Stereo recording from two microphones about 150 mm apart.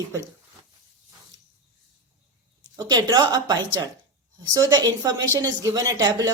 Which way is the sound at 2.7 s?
25° right (ahead or behind).